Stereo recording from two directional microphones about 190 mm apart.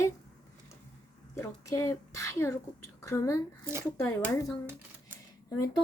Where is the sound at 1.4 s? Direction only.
15° left (ahead or behind).